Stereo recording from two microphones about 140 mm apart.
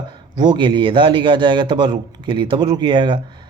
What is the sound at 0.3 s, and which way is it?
A man's voice, 35° right (ahead or behind).